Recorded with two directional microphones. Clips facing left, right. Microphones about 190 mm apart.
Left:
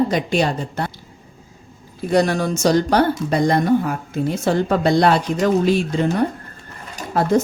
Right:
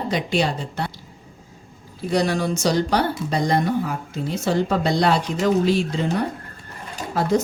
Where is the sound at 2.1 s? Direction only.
50° left (ahead or behind).